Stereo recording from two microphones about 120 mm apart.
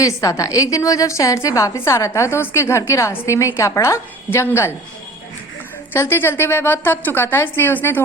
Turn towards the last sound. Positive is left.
turn(degrees=15)  # may be behind; listen again after turning